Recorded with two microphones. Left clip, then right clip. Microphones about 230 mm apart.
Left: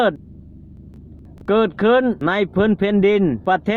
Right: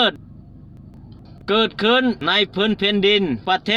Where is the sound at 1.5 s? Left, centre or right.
Left.